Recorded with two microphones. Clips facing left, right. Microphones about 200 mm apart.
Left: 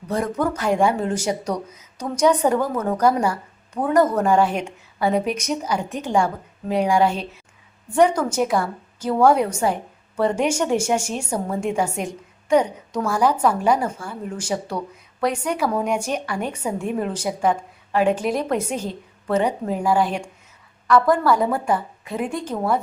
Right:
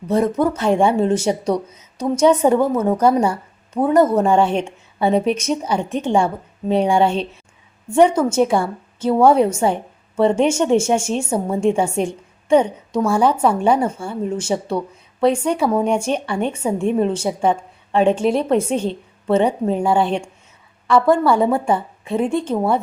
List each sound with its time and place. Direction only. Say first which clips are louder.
0.1 s a woman's voice: right 5 dB; 25° right (ahead or behind)